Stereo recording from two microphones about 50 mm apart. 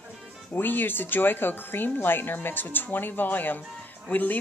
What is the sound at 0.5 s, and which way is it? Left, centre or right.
A woman's voice, left.